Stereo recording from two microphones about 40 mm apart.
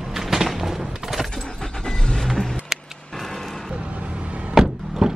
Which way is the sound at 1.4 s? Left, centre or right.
Centre.